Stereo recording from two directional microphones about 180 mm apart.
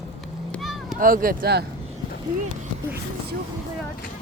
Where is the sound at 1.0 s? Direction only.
50° right (ahead or behind).